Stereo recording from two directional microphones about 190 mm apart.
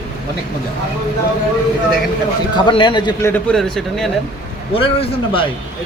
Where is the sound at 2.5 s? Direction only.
25° left (ahead or behind).